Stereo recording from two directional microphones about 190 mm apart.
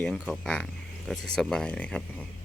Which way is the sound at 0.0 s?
5° left (ahead or behind).